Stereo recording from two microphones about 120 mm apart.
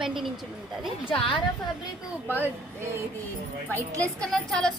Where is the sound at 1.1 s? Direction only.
50° left (ahead or behind).